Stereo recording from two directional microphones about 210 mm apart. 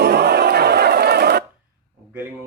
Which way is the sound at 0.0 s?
50° right (ahead or behind).